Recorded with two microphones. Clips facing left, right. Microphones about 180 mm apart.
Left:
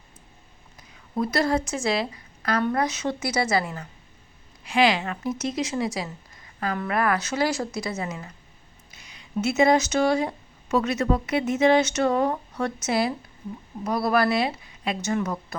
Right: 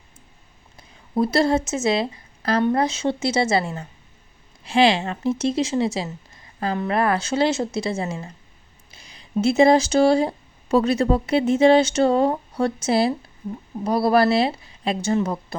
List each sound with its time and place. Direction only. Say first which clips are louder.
0.8 s a woman's voice: right 5 dB; 30° right (ahead or behind)